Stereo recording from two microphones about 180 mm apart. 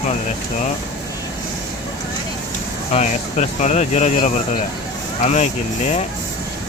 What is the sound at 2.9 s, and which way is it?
Speech, 40° left (ahead or behind).